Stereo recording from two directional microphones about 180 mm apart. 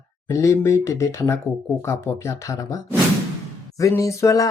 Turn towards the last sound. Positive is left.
turn(degrees=15)  # may be behind; listen again after turning